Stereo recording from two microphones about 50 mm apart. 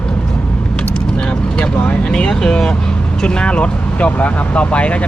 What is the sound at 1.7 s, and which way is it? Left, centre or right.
Vehicle, left.